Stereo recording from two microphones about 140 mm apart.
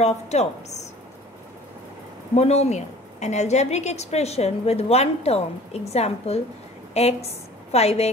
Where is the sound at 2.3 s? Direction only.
50° left (ahead or behind).